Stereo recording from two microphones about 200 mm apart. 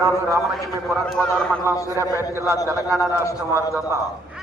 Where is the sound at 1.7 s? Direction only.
15° left (ahead or behind).